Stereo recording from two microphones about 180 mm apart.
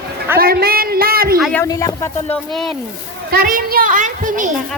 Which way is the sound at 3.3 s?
55° right (ahead or behind).